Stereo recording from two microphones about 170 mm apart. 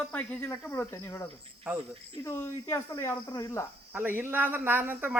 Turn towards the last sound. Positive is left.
turn(degrees=-10)  # may be behind; listen again after turning